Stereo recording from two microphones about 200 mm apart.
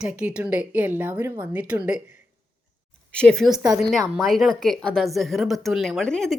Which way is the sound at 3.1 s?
5° left (ahead or behind).